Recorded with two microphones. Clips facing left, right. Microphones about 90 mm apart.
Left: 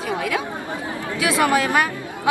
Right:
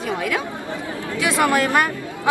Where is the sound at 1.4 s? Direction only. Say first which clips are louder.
Right 1 dB; 5° left (ahead or behind).